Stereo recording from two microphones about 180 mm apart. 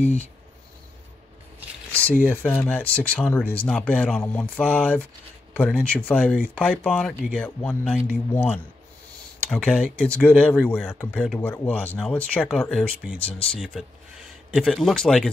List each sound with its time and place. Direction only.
1.9 s a sound: 10° left (ahead or behind)
2.2 s speech: 10° left (ahead or behind)
10.0 s speech: 10° left (ahead or behind)
13.2 s speech: 30° left (ahead or behind)
14.5 s speech: centre (ahead or behind)